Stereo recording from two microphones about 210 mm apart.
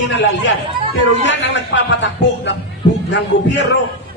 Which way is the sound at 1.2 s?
60° left (ahead or behind).